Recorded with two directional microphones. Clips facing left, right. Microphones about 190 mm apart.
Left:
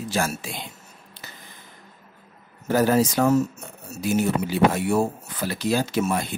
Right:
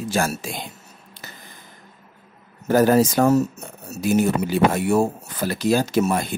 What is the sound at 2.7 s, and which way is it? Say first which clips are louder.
Speech: right 4 dB; 45° right (ahead or behind).